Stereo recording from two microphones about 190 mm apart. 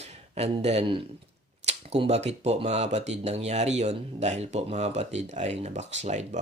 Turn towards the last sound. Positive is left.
turn(degrees=-35)  # may be behind; listen again after turning